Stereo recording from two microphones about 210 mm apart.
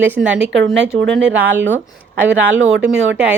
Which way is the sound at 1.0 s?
60° right (ahead or behind).